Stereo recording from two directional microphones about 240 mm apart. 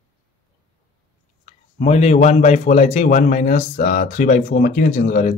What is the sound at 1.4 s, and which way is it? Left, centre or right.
A man's voice, left.